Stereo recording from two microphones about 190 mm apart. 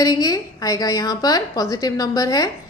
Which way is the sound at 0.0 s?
20° left (ahead or behind).